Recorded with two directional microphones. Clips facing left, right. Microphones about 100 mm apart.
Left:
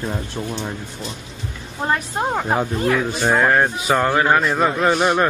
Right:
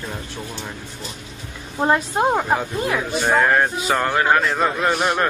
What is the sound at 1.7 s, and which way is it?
Speech, 15° right (ahead or behind).